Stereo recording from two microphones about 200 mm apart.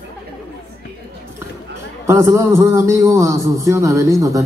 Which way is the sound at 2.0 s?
15° right (ahead or behind).